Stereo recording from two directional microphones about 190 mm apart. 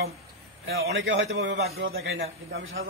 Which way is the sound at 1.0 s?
90° right.